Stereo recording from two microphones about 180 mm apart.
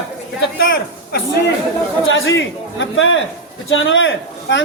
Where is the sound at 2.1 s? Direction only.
90° left.